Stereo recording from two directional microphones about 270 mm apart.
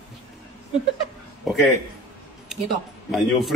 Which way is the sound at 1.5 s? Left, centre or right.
Centre.